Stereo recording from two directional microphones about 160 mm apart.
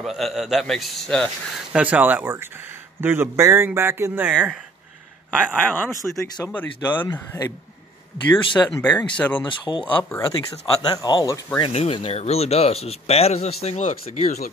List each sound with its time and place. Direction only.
0.0 s speech: centre (ahead or behind)
1.7 s speech: 10° right (ahead or behind)
6.0 s speech: centre (ahead or behind)
8.6 s speech: 10° left (ahead or behind)
9.5 s speech: 30° left (ahead or behind)
9.9 s speech: 15° left (ahead or behind)
11.7 s speech: 40° left (ahead or behind)